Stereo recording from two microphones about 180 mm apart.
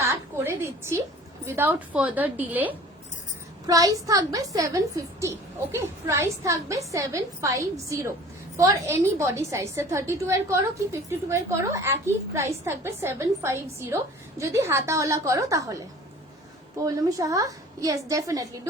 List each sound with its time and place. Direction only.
0.0 s a sound: 15° right (ahead or behind)
1.5 s a woman's voice: 10° right (ahead or behind)
16.8 s a woman's voice: 20° right (ahead or behind)